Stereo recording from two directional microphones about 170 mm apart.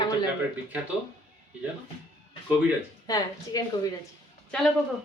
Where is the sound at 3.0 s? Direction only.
20° left (ahead or behind).